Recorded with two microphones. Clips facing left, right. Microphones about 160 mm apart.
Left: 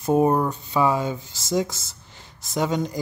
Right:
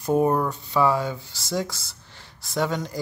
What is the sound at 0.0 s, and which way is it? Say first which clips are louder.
Speech: left 2 dB; 20° left (ahead or behind).